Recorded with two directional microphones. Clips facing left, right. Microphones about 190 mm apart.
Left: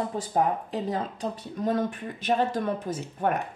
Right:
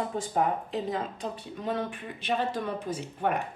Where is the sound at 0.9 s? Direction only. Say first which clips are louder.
Left 2 dB; 40° left (ahead or behind).